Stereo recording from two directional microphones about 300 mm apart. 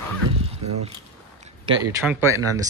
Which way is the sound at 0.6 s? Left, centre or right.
Right.